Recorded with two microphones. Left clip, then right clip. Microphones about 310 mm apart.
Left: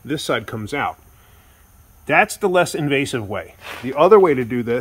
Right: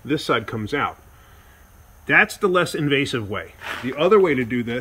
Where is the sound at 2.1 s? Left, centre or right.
Centre.